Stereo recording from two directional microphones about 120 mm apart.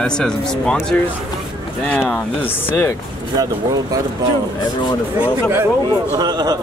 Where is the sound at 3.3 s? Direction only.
30° right (ahead or behind).